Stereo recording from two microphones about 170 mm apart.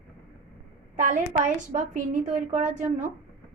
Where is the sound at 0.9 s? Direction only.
45° right (ahead or behind).